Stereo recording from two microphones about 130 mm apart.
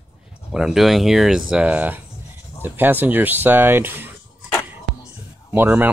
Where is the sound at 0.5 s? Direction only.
5° right (ahead or behind).